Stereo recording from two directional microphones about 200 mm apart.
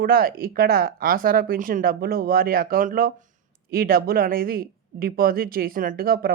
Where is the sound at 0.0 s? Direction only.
50° right (ahead or behind).